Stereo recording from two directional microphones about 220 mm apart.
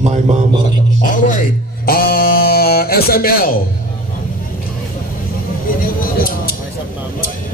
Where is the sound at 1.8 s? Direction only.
40° left (ahead or behind).